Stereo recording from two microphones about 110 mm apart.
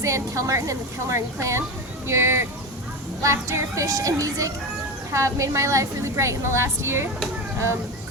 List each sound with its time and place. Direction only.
0.0 s a woman's voice: 30° right (ahead or behind)